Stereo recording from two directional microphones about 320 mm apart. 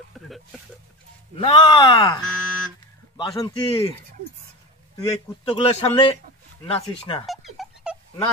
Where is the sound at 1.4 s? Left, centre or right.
Centre.